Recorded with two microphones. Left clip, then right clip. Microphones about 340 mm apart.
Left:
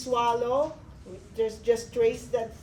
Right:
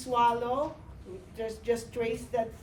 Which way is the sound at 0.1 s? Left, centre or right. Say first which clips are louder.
Left 1 dB; centre.